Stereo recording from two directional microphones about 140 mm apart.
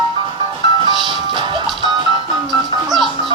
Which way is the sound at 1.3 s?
35° right (ahead or behind).